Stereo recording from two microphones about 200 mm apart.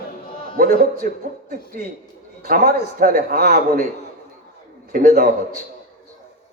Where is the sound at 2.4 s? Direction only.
45° right (ahead or behind).